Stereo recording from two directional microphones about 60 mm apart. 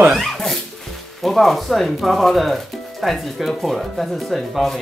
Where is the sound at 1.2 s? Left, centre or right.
Centre.